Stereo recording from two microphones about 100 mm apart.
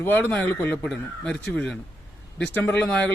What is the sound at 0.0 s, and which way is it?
A man's voice, 15° left (ahead or behind).